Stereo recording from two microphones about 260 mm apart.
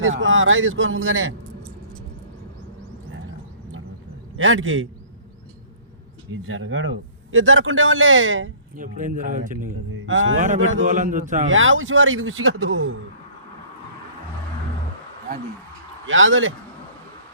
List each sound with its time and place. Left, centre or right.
0.0 s a man's voice: right
4.4 s a man's voice: right
6.3 s a man's voice: right
8.7 s speech: right
10.1 s a man's voice: right
10.3 s a man's voice: right
11.4 s a man's voice: right
16.0 s a man's voice: right